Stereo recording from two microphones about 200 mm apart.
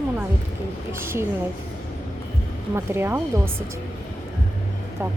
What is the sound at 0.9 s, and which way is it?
Speech, 10° right (ahead or behind).